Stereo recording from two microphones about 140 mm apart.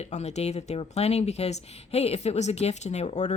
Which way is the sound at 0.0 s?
50° left (ahead or behind).